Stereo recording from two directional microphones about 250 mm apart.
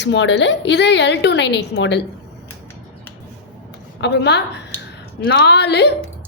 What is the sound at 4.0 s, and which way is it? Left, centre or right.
A woman's voice, left.